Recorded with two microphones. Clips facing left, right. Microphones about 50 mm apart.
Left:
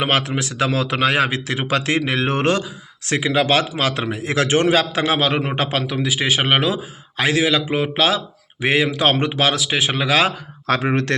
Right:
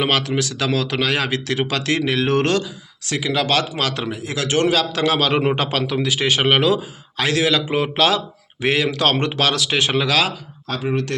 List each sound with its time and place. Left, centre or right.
0.0 s speech: left
4.2 s a man's voice: left; by 10.1 s centre
10.7 s speech: left